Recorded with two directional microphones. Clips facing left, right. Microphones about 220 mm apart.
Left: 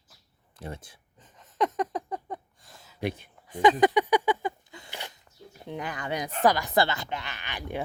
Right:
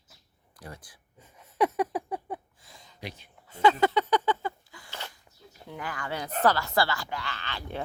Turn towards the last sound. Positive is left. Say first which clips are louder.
# left 2 dB
turn(degrees=15)  # may be behind; listen again after turning